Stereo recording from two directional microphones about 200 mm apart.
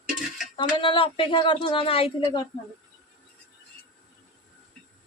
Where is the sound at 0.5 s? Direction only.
25° left (ahead or behind).